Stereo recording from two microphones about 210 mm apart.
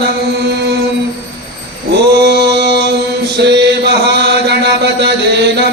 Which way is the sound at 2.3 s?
50° right (ahead or behind).